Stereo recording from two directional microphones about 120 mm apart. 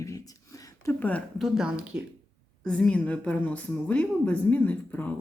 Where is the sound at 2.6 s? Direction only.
5° left (ahead or behind).